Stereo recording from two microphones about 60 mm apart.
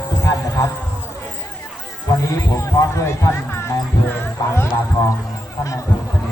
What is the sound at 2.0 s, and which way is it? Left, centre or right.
Speech, left.